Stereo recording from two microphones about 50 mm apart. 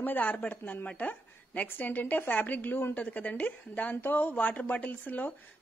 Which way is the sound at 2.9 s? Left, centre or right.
Left.